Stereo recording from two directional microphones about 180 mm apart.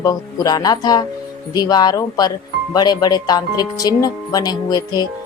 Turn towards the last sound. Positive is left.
turn(degrees=20)  # may be behind; listen again after turning